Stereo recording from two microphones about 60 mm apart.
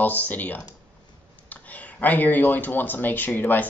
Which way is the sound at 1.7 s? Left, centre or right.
Left.